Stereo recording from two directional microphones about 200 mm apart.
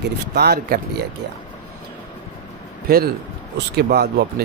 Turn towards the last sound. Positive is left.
turn(degrees=-50)  # may be behind; listen again after turning